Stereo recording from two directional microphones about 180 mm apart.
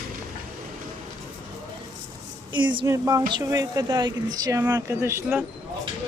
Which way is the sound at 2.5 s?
25° right (ahead or behind).